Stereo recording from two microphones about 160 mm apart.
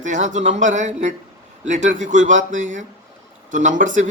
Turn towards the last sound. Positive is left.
turn(degrees=-55)  # may be behind; listen again after turning